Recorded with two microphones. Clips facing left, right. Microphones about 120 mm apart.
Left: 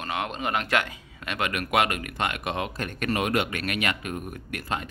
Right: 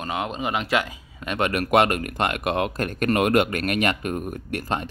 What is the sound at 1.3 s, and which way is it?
Speech, 40° right (ahead or behind).